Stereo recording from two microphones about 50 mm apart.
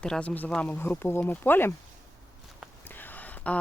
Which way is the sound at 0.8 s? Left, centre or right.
Left.